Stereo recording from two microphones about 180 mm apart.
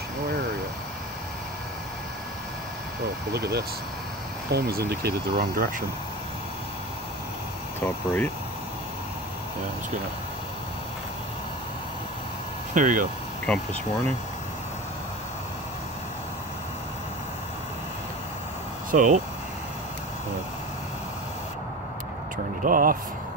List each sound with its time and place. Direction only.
3.3 s speech: 65° right (ahead or behind)
7.8 s speech: 10° left (ahead or behind)
12.7 s speech: 45° right (ahead or behind)
13.5 s speech: 5° left (ahead or behind)
18.9 s speech: 45° right (ahead or behind)
22.6 s speech: 50° right (ahead or behind)